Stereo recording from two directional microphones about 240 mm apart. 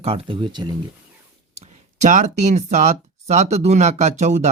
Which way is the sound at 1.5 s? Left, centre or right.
Right.